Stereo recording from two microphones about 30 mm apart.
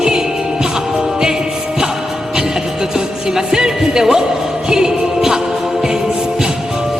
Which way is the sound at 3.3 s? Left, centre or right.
Right.